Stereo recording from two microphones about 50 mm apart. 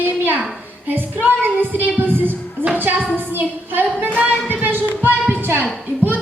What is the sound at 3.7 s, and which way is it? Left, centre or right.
Speech, right.